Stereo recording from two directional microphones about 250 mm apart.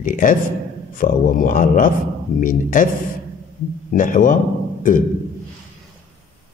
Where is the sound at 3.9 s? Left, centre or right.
Left.